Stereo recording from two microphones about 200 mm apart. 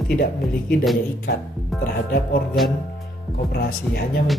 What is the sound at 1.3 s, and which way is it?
Speech, 45° left (ahead or behind).